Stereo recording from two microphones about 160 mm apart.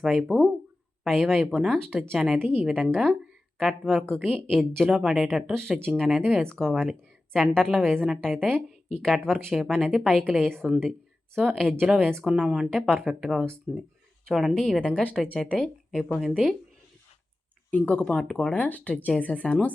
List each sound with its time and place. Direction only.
0.0 s a woman's voice: 5° right (ahead or behind)
2.9 s a woman's voice: 5° left (ahead or behind)
11.8 s a woman's voice: 10° right (ahead or behind)
14.3 s speech: centre (ahead or behind)
17.7 s speech: 10° left (ahead or behind)